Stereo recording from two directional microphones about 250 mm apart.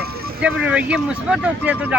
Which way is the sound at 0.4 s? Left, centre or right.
Centre.